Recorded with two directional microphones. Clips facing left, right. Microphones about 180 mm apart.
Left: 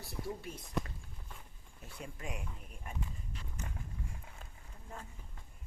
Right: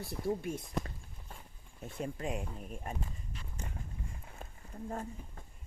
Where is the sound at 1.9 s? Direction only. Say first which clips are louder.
Right 9 dB; 45° right (ahead or behind).